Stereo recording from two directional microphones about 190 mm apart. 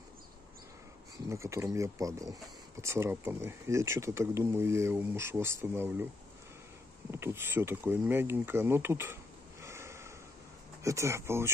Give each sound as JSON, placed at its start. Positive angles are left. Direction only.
{"t": 1.3, "sound": "speech", "side_deg": -15}
{"t": 7.1, "sound": "speech", "side_deg": -15}